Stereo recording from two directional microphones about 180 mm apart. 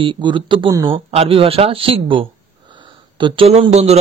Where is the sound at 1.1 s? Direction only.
30° right (ahead or behind).